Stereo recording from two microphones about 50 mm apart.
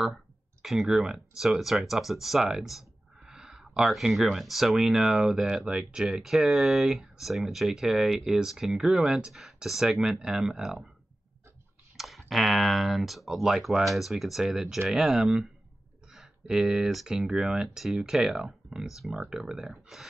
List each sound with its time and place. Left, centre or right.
0.6 s speech: centre
3.2 s a sound: centre
3.9 s speech: centre
5.7 s speech: centre
12.0 s speech: centre